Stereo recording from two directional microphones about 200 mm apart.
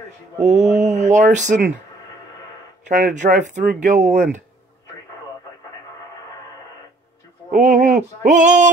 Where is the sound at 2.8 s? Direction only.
40° right (ahead or behind).